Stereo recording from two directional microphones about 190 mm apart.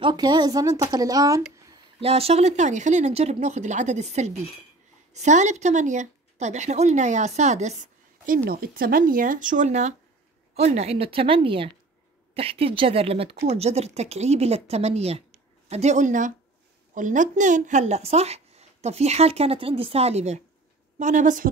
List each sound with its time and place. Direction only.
0.0 s speech: 25° right (ahead or behind)
2.0 s speech: 30° right (ahead or behind)
8.5 s speech: 50° right (ahead or behind)